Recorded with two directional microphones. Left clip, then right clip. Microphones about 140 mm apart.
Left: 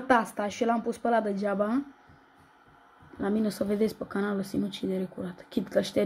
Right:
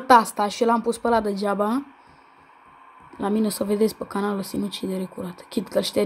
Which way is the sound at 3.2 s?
25° right (ahead or behind).